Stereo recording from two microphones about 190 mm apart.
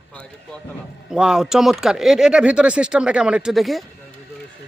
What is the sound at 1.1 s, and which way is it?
Speech, 5° right (ahead or behind).